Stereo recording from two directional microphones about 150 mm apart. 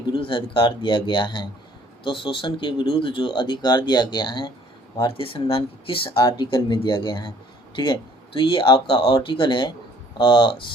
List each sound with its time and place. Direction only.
0.0 s speech: 35° left (ahead or behind)